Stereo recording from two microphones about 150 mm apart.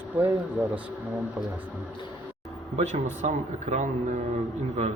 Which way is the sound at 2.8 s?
50° right (ahead or behind).